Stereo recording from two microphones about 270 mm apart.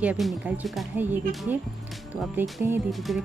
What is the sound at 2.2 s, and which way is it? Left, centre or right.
Speech, centre.